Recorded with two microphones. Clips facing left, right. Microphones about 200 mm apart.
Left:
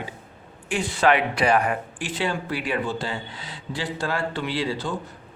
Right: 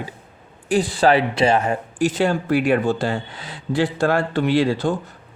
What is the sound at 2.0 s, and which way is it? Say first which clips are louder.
Speech: right 8 dB; 45° right (ahead or behind).